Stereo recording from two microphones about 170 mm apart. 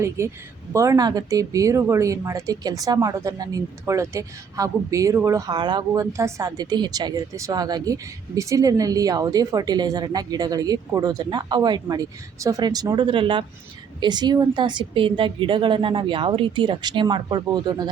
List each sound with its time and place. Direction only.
0.2 s a woman's voice: 15° right (ahead or behind)